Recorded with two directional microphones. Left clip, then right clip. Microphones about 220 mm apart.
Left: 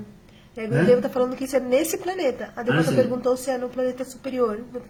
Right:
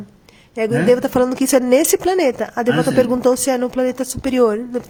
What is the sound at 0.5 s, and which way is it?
A woman's voice, 45° right (ahead or behind).